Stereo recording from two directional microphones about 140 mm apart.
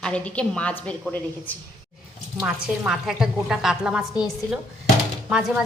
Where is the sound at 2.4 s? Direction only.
10° right (ahead or behind).